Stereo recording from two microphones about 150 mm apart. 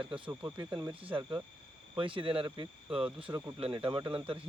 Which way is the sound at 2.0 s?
35° right (ahead or behind).